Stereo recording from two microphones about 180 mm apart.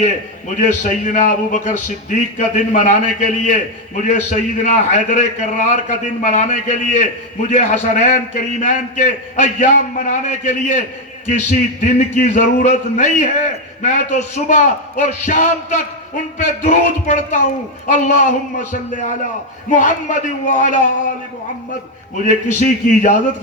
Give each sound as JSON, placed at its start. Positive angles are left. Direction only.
{"t": 0.0, "sound": "a man's voice", "side_deg": 45}
{"t": 22.3, "sound": "a man's voice", "side_deg": 45}